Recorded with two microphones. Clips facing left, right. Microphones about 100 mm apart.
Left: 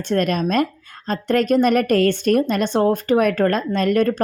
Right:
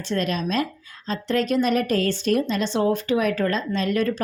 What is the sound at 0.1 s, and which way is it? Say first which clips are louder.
Speech: left 5 dB; 50° left (ahead or behind).